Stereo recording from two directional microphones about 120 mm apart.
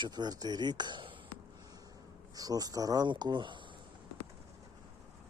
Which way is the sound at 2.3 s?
30° right (ahead or behind).